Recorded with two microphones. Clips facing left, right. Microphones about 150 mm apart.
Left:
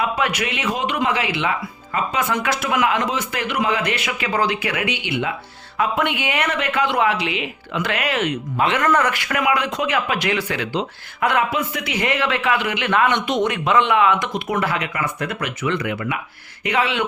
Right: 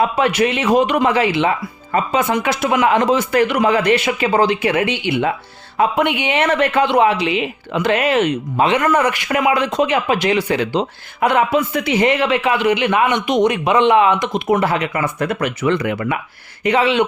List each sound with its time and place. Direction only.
0.0 s speech: 30° right (ahead or behind)
2.1 s speech: 25° right (ahead or behind)
3.1 s speech: 40° right (ahead or behind)
4.2 s speech: 25° right (ahead or behind); by 16.1 s 40° right (ahead or behind)
16.6 s speech: 25° right (ahead or behind)